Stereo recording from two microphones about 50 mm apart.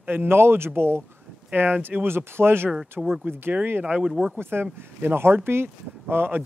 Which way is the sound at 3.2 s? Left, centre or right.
Right.